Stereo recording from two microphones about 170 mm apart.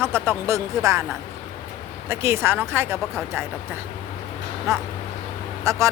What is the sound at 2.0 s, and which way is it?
Speech, 15° right (ahead or behind).